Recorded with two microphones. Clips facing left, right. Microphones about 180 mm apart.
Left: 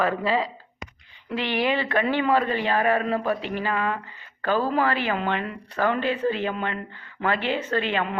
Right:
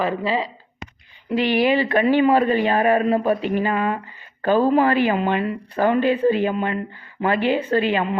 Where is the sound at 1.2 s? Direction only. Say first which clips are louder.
Right 6 dB; 10° right (ahead or behind).